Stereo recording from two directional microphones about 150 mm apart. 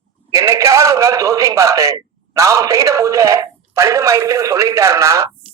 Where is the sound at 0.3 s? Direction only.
20° right (ahead or behind).